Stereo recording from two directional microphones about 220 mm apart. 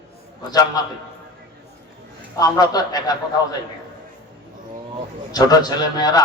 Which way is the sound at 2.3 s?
15° left (ahead or behind).